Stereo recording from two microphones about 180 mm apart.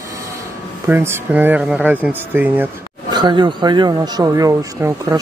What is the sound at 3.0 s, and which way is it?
Speech, 25° right (ahead or behind).